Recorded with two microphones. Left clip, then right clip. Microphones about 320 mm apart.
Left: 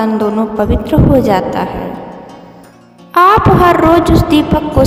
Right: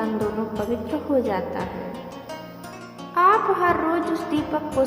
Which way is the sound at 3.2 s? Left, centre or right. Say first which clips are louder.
Left 11 dB; left.